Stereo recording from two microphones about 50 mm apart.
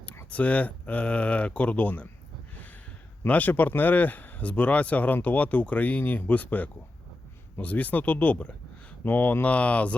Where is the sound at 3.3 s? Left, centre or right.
Left.